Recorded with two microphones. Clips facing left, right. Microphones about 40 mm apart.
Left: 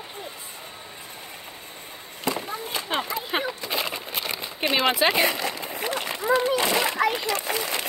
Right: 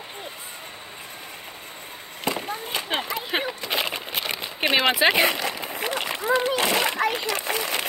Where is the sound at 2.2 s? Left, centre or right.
Right.